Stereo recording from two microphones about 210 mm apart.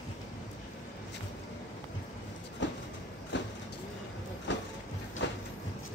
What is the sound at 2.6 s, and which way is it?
Train, 60° left (ahead or behind).